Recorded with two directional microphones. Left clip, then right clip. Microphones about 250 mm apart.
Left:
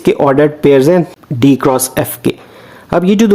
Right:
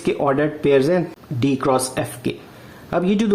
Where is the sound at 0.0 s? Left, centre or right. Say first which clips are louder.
Left 10 dB; left.